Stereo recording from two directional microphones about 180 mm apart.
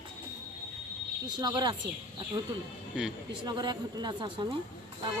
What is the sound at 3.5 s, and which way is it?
A woman's voice, 25° right (ahead or behind).